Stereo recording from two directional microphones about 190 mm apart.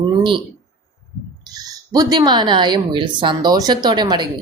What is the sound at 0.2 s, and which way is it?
Speech, 25° right (ahead or behind).